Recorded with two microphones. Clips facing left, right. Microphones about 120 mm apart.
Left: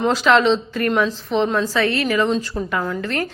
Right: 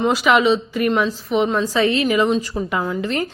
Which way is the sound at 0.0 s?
10° right (ahead or behind).